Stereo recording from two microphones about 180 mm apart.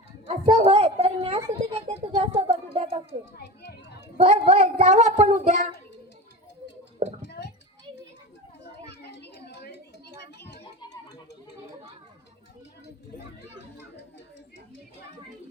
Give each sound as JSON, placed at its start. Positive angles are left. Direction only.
{"t": 0.4, "sound": "a sound", "side_deg": -30}
{"t": 3.1, "sound": "children playing", "side_deg": 70}
{"t": 4.2, "sound": "speech", "side_deg": -40}
{"t": 7.3, "sound": "a sound", "side_deg": 65}
{"t": 8.9, "sound": "children playing", "side_deg": 70}
{"t": 10.6, "sound": "music", "side_deg": 25}